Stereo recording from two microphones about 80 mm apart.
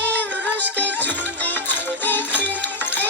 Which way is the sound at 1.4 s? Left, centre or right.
Left.